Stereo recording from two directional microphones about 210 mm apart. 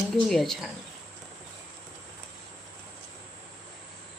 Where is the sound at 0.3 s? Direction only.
Centre (ahead or behind).